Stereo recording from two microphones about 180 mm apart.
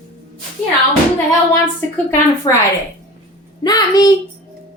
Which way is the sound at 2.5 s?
25° left (ahead or behind).